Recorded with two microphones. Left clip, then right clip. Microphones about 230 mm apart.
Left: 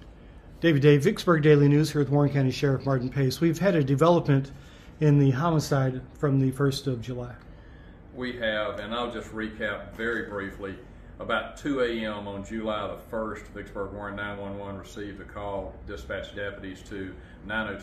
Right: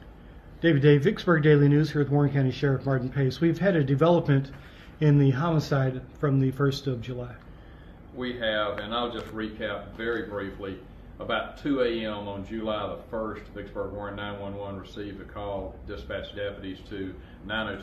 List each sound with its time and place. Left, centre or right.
0.6 s speech: centre
8.2 s a man's voice: centre